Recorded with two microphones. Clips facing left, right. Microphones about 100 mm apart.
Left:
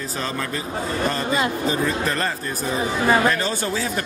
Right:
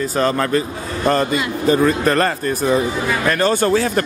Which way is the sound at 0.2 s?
60° right (ahead or behind).